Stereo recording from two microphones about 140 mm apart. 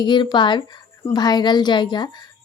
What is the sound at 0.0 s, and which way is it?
Speech, 35° left (ahead or behind).